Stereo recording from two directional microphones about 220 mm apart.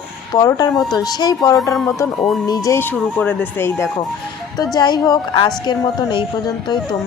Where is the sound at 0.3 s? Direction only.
15° left (ahead or behind).